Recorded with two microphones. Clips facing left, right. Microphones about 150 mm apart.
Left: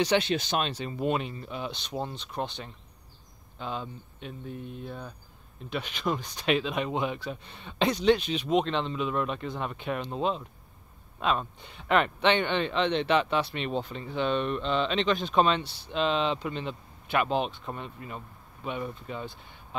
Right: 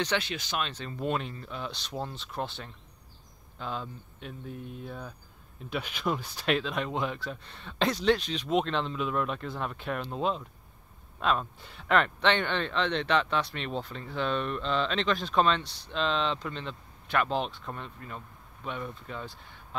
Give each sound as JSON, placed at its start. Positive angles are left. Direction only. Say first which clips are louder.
{"t": 0.2, "sound": "speech", "louder": "left 6 dB", "side_deg": 25}
{"t": 0.7, "sound": "speech", "louder": "left 3 dB", "side_deg": 10}